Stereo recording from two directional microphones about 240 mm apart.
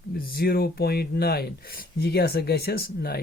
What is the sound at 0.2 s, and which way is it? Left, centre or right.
Speech, left.